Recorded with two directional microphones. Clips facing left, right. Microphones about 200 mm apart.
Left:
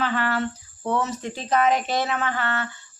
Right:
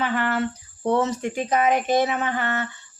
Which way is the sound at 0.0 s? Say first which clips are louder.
Right 1 dB; 15° right (ahead or behind).